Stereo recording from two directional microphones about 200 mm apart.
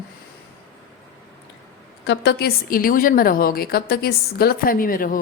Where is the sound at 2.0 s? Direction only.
55° left (ahead or behind).